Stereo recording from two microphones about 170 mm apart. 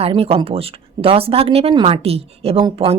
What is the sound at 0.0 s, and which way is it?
Speech, 35° right (ahead or behind).